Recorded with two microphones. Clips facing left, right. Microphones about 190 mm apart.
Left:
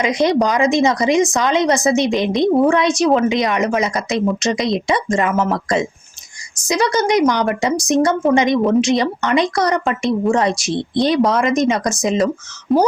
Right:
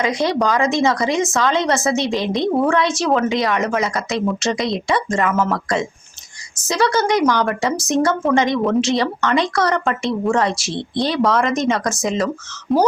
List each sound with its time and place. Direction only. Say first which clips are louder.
0.0 s a woman's voice: left 3 dB; 20° left (ahead or behind)
12.7 s speech: left 2 dB; centre (ahead or behind)